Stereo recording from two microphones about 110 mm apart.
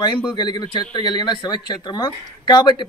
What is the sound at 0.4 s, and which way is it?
Speech, 40° left (ahead or behind).